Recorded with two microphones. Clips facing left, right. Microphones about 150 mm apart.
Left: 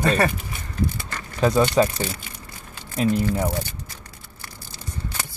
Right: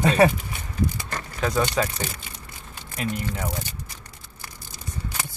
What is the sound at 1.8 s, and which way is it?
Speech, 25° left (ahead or behind).